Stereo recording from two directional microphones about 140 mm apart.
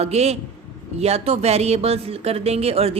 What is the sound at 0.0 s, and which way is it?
A woman's voice, 50° right (ahead or behind).